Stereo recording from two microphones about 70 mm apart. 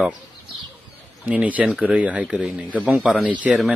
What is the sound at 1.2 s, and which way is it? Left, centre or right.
Speech, right.